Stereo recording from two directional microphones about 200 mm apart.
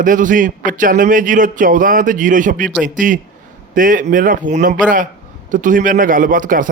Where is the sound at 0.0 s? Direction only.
40° right (ahead or behind).